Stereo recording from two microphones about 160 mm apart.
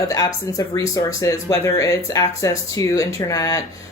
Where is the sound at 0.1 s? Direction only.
20° left (ahead or behind).